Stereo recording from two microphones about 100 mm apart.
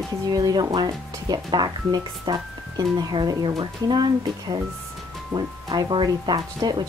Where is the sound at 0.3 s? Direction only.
40° right (ahead or behind).